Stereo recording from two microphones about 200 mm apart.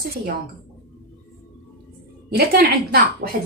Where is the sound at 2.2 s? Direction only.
55° right (ahead or behind).